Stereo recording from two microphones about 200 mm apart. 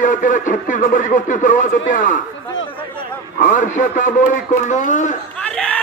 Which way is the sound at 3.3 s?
40° left (ahead or behind).